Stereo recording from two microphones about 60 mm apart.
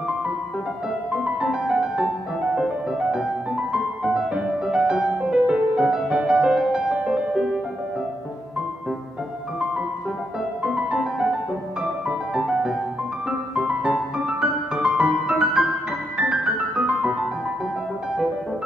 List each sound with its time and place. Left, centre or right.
1.1 s music: centre
3.7 s music: centre
10.6 s music: centre
13.6 s music: centre